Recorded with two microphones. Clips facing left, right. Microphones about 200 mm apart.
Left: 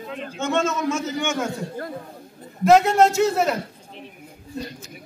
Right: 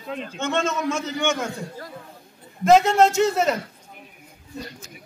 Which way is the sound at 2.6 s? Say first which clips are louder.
Even; centre (ahead or behind).